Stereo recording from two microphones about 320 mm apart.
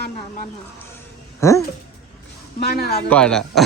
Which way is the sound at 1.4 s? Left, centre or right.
Centre.